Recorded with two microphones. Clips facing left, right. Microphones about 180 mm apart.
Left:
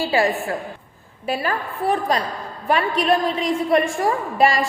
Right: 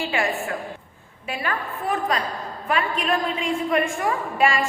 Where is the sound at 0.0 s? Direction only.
35° left (ahead or behind).